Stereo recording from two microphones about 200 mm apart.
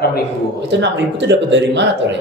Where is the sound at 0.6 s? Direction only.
60° right (ahead or behind).